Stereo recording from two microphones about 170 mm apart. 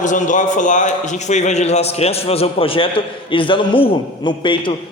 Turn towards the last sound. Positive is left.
turn(degrees=30)  # may be behind; listen again after turning